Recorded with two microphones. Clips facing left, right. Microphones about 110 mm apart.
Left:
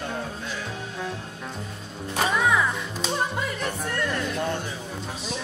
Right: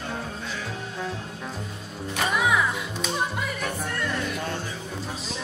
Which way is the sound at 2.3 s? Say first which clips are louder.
Even; 10° right (ahead or behind).